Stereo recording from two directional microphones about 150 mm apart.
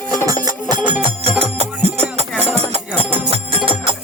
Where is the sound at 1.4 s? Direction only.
45° right (ahead or behind).